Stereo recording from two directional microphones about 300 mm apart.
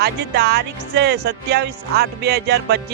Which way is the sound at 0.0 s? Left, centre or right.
Right.